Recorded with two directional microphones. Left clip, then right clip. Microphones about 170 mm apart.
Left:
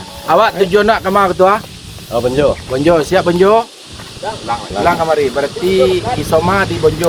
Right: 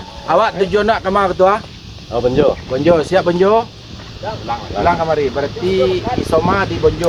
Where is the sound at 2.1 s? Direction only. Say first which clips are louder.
Even; 65° right (ahead or behind).